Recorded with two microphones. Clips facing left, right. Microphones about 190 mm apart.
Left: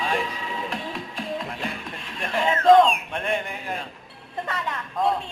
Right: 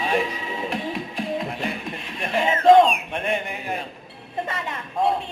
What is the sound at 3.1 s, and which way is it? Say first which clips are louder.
Speech: right 1 dB; 20° right (ahead or behind).